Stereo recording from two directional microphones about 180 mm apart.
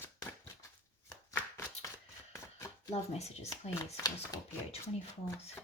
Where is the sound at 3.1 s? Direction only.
35° left (ahead or behind).